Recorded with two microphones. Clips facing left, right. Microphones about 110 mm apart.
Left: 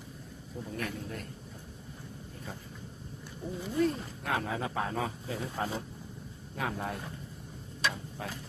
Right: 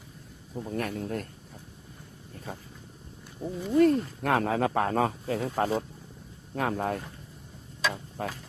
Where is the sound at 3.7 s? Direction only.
60° right (ahead or behind).